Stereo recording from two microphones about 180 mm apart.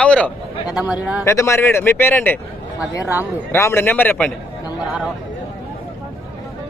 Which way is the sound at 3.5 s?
15° left (ahead or behind).